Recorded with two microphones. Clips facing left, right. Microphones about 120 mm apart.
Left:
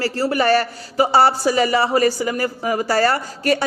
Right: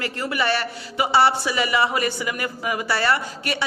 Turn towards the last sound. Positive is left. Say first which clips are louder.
# left 5 dB
turn(degrees=40)  # may be behind; listen again after turning